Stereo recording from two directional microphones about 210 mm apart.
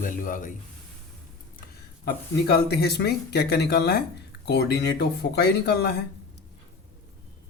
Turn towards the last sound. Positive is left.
turn(degrees=50)  # may be behind; listen again after turning